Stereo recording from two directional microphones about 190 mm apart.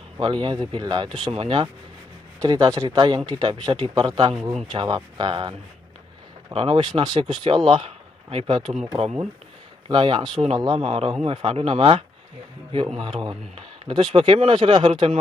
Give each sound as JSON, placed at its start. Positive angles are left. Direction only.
{"t": 0.2, "sound": "a man's voice", "side_deg": -25}
{"t": 4.3, "sound": "speech", "side_deg": 0}
{"t": 4.6, "sound": "a man's voice", "side_deg": -25}
{"t": 13.2, "sound": "a man's voice", "side_deg": -25}